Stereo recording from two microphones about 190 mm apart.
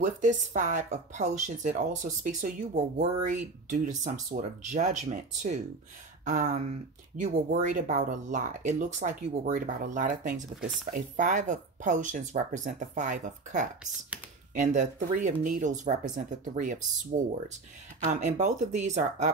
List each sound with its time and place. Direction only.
0.0 s speech: 40° right (ahead or behind)
18.0 s speech: 40° right (ahead or behind)